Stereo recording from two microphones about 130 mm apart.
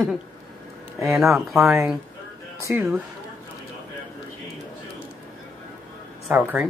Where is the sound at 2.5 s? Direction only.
20° right (ahead or behind).